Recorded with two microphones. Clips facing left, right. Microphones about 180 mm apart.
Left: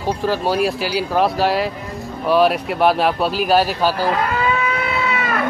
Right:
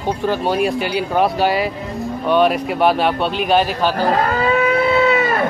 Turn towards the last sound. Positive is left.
turn(degrees=-30)  # may be behind; listen again after turning